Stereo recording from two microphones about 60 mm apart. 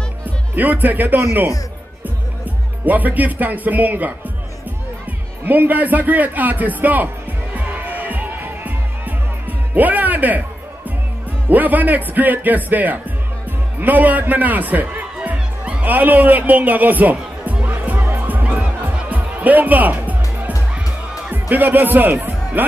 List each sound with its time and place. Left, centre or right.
0.6 s speech: right
5.4 s a man's voice: right
7.5 s music: right
11.4 s a man's voice: right
15.2 s music: right
21.3 s speech: right